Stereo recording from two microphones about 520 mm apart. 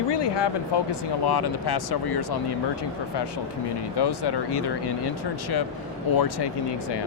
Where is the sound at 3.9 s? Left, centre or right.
Left.